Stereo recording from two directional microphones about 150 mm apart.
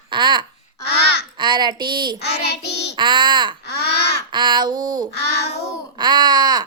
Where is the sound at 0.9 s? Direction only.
90° left.